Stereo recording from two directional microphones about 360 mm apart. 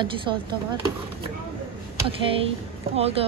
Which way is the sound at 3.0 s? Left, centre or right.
Centre.